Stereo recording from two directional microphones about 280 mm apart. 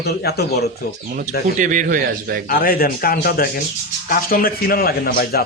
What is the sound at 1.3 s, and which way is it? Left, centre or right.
A man's voice, right.